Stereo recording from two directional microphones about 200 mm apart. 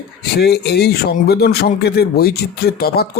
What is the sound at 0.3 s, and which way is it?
Speech, 55° left (ahead or behind).